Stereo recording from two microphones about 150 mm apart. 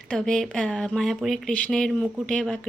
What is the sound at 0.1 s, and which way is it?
Speech, 5° left (ahead or behind).